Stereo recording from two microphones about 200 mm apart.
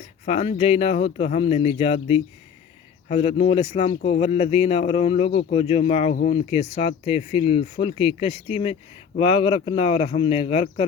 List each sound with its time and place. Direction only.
0.3 s speech: 30° left (ahead or behind)